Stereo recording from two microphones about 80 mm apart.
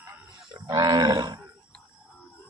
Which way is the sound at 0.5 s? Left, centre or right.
Right.